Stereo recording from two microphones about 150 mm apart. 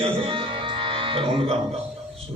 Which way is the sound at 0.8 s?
35° right (ahead or behind).